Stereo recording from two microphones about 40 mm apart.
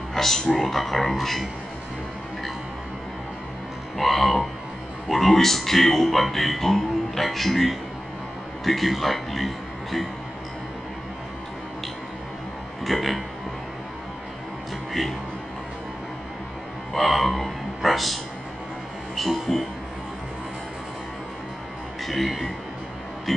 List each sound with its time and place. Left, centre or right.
0.1 s music: centre
0.6 s speech: centre
4.0 s speech: centre
12.8 s speech: centre
14.9 s speech: centre
16.9 s speech: centre
22.0 s speech: centre